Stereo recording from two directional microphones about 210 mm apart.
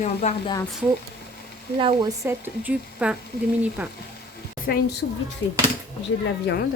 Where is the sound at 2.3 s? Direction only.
5° right (ahead or behind).